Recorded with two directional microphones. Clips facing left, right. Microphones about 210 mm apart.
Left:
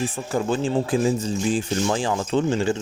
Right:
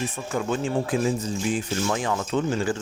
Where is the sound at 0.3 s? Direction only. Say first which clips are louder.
Left 3 dB; 30° left (ahead or behind).